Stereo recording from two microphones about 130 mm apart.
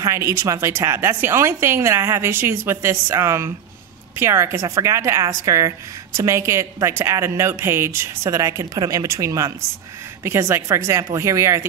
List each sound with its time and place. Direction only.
0.0 s a woman's voice: 20° right (ahead or behind)